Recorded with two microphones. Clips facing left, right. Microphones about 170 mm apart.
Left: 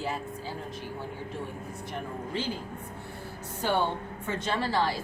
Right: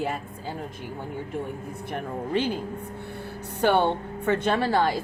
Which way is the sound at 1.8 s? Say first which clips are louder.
Right 6 dB; 60° right (ahead or behind).